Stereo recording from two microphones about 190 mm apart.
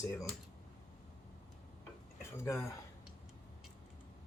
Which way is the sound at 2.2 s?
15° left (ahead or behind).